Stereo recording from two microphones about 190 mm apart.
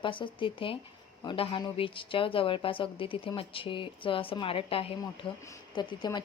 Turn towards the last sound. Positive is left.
turn(degrees=25)  # may be behind; listen again after turning